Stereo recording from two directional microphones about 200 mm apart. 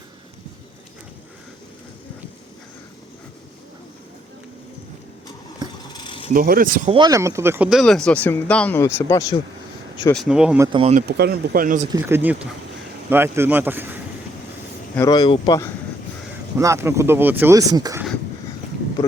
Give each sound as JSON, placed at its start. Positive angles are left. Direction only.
{"t": 5.9, "sound": "mechanisms", "side_deg": 25}
{"t": 6.3, "sound": "speech", "side_deg": -45}
{"t": 6.9, "sound": "speech", "side_deg": -20}
{"t": 10.1, "sound": "speech", "side_deg": 0}
{"t": 10.7, "sound": "speech", "side_deg": -25}
{"t": 10.9, "sound": "speech", "side_deg": -50}
{"t": 11.9, "sound": "speech", "side_deg": -15}
{"t": 14.9, "sound": "speech", "side_deg": 20}
{"t": 16.6, "sound": "speech", "side_deg": -15}